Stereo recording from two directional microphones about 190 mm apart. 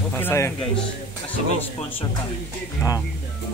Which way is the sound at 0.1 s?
10° left (ahead or behind).